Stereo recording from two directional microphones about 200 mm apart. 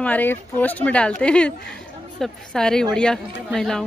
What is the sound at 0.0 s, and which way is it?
A woman's voice, 10° left (ahead or behind).